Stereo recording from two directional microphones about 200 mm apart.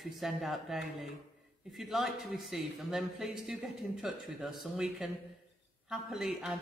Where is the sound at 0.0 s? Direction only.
Centre (ahead or behind).